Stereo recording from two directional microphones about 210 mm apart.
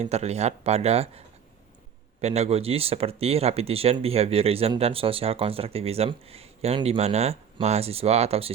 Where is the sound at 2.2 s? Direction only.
30° right (ahead or behind).